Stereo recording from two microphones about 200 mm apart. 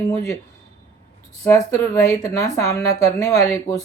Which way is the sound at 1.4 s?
15° left (ahead or behind).